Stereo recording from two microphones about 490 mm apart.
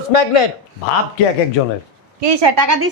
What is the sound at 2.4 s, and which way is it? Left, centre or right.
Speech, right.